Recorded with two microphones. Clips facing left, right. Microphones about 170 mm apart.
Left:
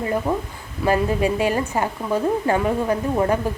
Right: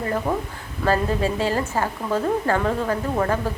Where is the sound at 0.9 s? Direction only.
15° left (ahead or behind).